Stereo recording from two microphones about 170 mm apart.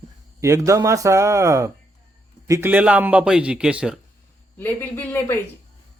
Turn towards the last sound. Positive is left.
turn(degrees=15)  # may be behind; listen again after turning